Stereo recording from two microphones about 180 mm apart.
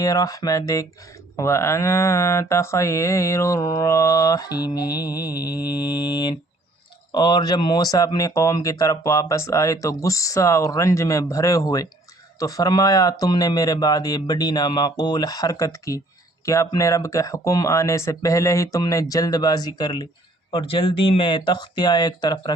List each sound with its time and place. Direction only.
0.0 s speech: 20° left (ahead or behind)
5.4 s mantra: 60° left (ahead or behind)
5.7 s speech: 25° left (ahead or behind)